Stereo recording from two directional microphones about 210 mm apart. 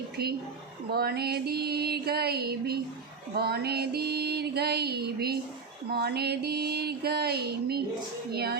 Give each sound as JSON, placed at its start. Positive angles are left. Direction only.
{"t": 0.2, "sound": "music", "side_deg": -50}